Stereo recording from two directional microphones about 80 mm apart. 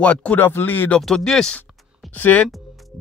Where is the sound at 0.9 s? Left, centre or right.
Centre.